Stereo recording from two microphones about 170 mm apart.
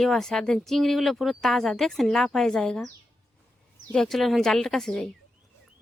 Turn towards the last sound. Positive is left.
turn(degrees=5)  # may be behind; listen again after turning